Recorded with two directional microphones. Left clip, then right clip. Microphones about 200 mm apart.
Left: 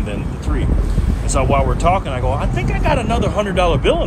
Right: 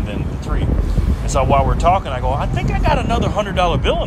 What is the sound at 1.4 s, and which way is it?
Speech, 15° right (ahead or behind).